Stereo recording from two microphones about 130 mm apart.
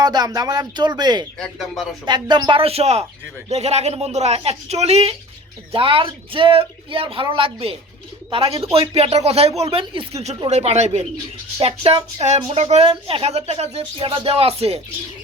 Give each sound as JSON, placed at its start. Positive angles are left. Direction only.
{"t": 0.0, "sound": "speech", "side_deg": -30}
{"t": 1.4, "sound": "speech", "side_deg": 0}
{"t": 2.0, "sound": "speech", "side_deg": -35}
{"t": 5.7, "sound": "speech", "side_deg": -45}